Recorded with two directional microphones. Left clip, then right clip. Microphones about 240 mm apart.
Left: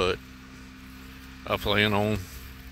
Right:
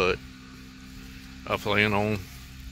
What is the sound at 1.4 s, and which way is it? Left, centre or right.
Speech, centre.